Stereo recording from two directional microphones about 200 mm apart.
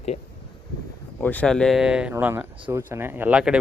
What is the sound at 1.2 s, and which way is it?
Speech, 10° left (ahead or behind).